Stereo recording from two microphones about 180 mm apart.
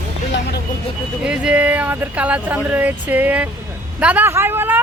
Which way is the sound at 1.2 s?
5° right (ahead or behind).